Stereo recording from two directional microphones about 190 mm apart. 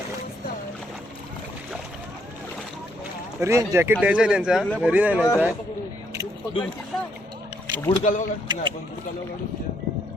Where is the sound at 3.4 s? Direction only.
15° right (ahead or behind).